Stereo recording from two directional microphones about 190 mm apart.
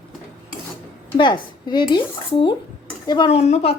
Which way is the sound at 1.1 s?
25° left (ahead or behind).